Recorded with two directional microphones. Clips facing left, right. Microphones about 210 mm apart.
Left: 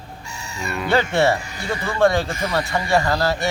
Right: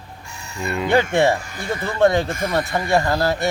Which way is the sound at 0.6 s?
20° right (ahead or behind).